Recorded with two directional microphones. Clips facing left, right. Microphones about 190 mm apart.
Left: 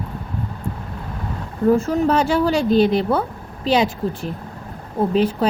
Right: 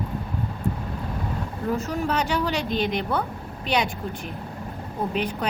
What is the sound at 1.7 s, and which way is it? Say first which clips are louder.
Speech: left 9 dB; 45° left (ahead or behind).